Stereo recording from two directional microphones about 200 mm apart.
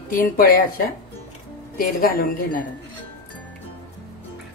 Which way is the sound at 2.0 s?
45° left (ahead or behind).